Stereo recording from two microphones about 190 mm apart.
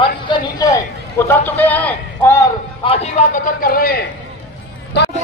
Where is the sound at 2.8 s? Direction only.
30° left (ahead or behind).